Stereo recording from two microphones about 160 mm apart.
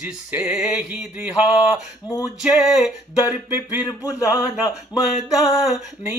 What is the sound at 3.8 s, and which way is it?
Speech, 20° left (ahead or behind).